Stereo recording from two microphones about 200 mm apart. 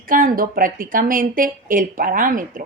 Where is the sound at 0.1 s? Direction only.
45° right (ahead or behind).